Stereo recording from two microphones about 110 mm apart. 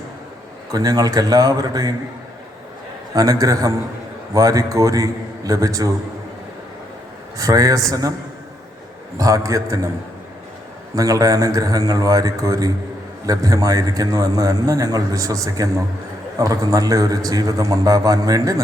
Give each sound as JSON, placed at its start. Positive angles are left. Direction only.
{"t": 0.7, "sound": "a man's voice", "side_deg": -35}
{"t": 3.2, "sound": "a man's voice", "side_deg": -30}
{"t": 7.3, "sound": "a man's voice", "side_deg": -35}
{"t": 9.1, "sound": "a man's voice", "side_deg": -30}
{"t": 10.9, "sound": "a man's voice", "side_deg": -30}